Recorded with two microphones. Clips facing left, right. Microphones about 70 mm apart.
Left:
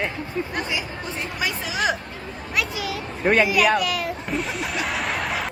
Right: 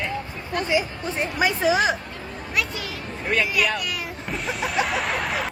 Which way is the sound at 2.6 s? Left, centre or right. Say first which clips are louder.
Left 2 dB; centre.